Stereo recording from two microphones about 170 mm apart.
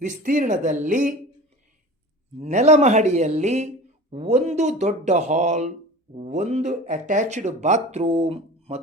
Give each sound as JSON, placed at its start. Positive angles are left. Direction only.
{"t": 0.0, "sound": "speech", "side_deg": -50}
{"t": 2.4, "sound": "speech", "side_deg": -45}